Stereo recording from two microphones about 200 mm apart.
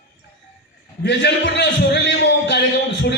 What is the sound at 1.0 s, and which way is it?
A man's voice, 60° left (ahead or behind).